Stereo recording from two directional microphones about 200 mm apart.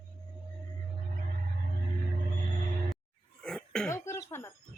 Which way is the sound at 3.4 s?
5° left (ahead or behind).